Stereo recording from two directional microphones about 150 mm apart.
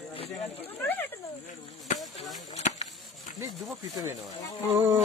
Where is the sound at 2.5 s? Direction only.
50° left (ahead or behind).